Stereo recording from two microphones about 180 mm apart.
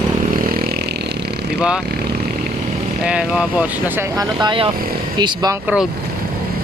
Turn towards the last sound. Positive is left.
turn(degrees=-5)  # may be behind; listen again after turning